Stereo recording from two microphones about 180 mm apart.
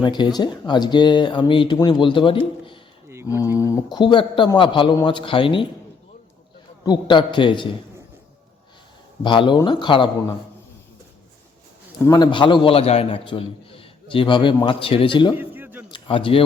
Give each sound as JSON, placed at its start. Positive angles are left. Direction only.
{"t": 0.0, "sound": "a man's voice", "side_deg": 25}
{"t": 3.2, "sound": "a man's voice", "side_deg": 20}
{"t": 6.8, "sound": "a man's voice", "side_deg": 25}
{"t": 9.2, "sound": "a man's voice", "side_deg": 25}
{"t": 12.0, "sound": "a man's voice", "side_deg": 20}
{"t": 15.4, "sound": "a sound", "side_deg": -10}
{"t": 15.9, "sound": "a sound", "side_deg": 30}